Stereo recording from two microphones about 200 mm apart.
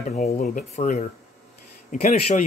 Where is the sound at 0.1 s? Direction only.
35° left (ahead or behind).